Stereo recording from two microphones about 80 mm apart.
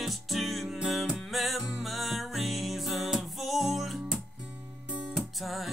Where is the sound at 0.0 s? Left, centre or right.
Centre.